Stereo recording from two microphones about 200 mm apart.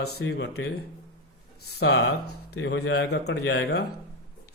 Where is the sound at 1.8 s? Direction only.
60° left (ahead or behind).